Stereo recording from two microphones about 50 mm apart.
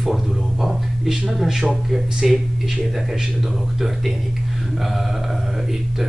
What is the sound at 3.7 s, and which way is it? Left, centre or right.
Speech, centre.